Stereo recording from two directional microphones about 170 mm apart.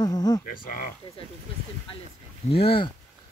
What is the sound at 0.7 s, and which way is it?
Speech, 55° left (ahead or behind).